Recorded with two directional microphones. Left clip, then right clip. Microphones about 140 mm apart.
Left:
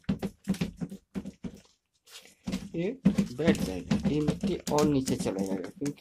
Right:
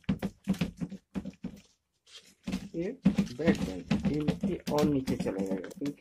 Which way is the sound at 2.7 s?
30° left (ahead or behind).